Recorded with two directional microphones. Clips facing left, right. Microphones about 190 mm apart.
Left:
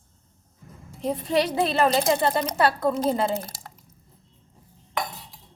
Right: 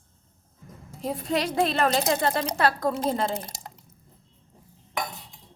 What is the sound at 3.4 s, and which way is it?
Drip, 20° right (ahead or behind).